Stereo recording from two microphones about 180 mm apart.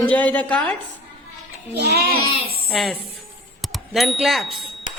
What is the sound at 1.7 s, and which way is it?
Speech, 65° right (ahead or behind).